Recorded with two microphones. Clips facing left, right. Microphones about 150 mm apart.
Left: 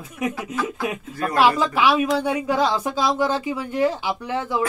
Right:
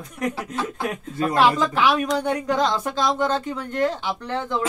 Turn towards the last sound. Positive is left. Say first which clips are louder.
# left 1 dB
turn(degrees=10)  # may be behind; listen again after turning